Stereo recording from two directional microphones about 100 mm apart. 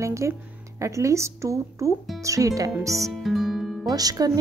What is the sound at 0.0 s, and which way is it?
Speech, 30° right (ahead or behind).